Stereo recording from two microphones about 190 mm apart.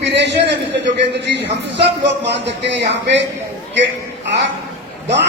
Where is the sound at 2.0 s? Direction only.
65° right (ahead or behind).